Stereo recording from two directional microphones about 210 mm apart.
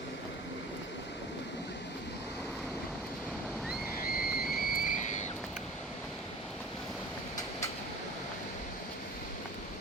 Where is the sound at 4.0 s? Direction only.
45° left (ahead or behind).